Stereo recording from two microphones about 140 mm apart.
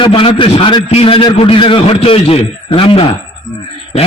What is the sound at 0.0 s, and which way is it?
A man's voice, 40° left (ahead or behind).